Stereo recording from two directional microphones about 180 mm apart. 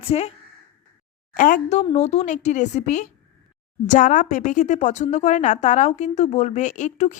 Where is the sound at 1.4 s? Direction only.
45° left (ahead or behind).